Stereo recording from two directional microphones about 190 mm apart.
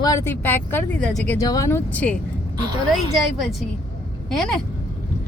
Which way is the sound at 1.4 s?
15° left (ahead or behind).